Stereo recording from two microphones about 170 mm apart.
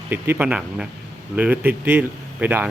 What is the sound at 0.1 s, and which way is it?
Speech, 10° right (ahead or behind).